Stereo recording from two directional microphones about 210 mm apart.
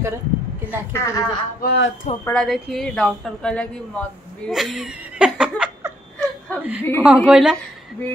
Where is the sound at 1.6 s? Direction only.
55° left (ahead or behind).